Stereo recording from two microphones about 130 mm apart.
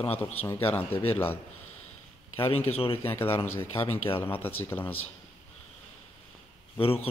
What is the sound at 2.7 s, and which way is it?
Speech, 50° left (ahead or behind).